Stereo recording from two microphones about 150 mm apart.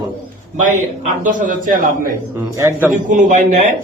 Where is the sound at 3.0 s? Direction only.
55° right (ahead or behind).